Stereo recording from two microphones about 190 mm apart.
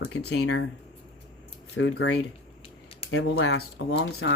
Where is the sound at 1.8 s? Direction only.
70° left (ahead or behind).